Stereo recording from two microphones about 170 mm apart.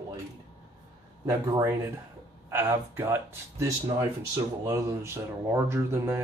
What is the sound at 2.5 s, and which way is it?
Speech, 15° right (ahead or behind).